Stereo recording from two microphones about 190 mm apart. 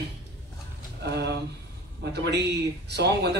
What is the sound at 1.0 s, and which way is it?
Speech, 60° right (ahead or behind).